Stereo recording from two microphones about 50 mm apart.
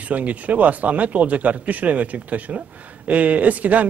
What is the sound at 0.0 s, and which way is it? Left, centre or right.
Speech, right.